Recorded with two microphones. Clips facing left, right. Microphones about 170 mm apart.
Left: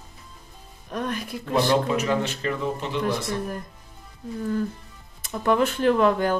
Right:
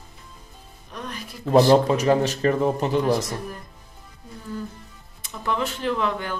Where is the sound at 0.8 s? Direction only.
50° left (ahead or behind).